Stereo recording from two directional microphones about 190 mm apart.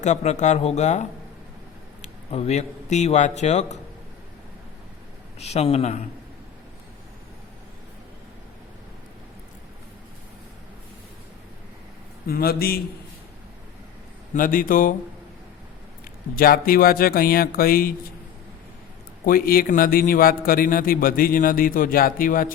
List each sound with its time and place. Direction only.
0.0 s speech: 40° left (ahead or behind)
5.4 s speech: 35° left (ahead or behind)
12.3 s a man's voice: 50° left (ahead or behind)
14.3 s a man's voice: 45° left (ahead or behind)
16.3 s a man's voice: 50° left (ahead or behind)
19.2 s a man's voice: 50° left (ahead or behind)